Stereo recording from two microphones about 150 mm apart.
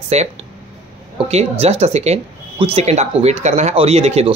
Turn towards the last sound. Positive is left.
turn(degrees=-45)  # may be behind; listen again after turning